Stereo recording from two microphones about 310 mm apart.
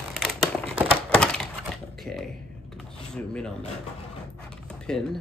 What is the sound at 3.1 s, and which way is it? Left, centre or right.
Speech, centre.